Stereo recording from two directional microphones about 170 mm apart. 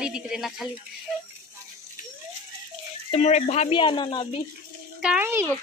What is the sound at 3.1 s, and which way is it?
Speech, 40° left (ahead or behind).